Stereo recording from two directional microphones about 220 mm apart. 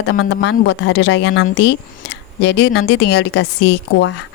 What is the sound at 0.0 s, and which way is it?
Speech, 55° left (ahead or behind).